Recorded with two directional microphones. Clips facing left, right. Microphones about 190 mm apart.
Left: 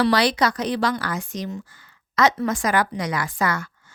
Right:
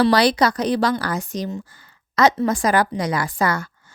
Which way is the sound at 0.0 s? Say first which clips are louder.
Right 3 dB; 35° right (ahead or behind).